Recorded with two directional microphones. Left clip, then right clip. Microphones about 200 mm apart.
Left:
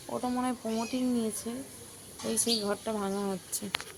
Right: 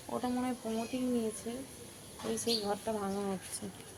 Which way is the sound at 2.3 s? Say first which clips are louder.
Left 3 dB; 50° left (ahead or behind).